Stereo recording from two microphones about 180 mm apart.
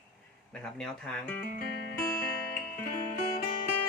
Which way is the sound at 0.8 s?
5° left (ahead or behind).